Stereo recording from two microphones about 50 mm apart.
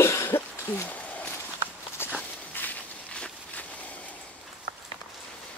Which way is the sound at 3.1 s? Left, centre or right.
Left.